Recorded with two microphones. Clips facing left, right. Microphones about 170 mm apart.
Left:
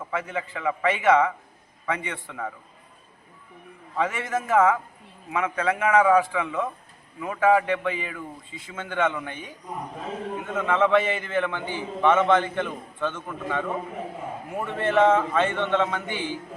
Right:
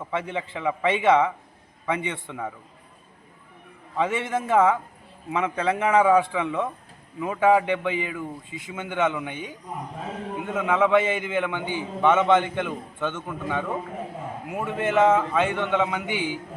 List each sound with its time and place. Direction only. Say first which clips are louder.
0.1 s a man's voice: right 1 dB; 25° right (ahead or behind)
3.9 s a man's voice: right 1 dB; 25° right (ahead or behind)
14.7 s a man's voice: even; 15° right (ahead or behind)
15.1 s a man's voice: even; centre (ahead or behind)
15.4 s a man's voice: even; 15° right (ahead or behind)